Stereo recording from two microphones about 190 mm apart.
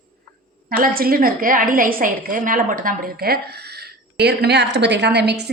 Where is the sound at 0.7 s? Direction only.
50° right (ahead or behind).